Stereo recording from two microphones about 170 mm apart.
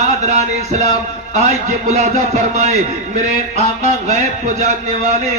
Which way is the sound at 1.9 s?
45° right (ahead or behind).